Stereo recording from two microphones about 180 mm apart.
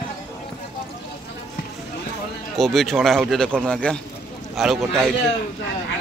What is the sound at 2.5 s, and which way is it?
Speech, centre (ahead or behind).